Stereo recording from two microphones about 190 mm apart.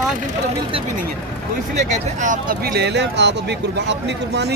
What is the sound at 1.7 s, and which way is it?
Speech, 40° right (ahead or behind).